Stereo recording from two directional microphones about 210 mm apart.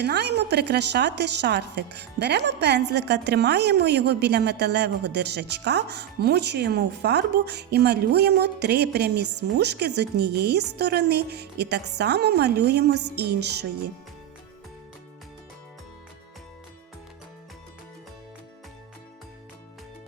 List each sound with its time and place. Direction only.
0.0 s a woman's voice: 55° right (ahead or behind)